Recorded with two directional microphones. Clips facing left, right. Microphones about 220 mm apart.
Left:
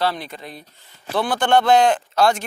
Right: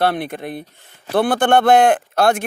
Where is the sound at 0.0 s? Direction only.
55° right (ahead or behind).